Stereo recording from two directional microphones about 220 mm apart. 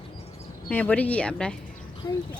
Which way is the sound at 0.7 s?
5° left (ahead or behind).